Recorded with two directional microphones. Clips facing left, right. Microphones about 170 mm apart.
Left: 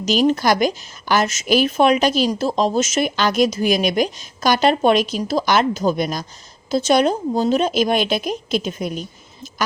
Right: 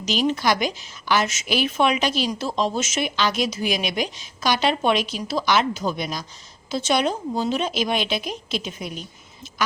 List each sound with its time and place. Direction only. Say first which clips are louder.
0.0 s a woman's voice: left 5 dB; 45° left (ahead or behind)